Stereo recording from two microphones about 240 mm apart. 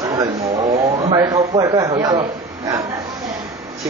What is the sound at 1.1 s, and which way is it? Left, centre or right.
Speech, centre.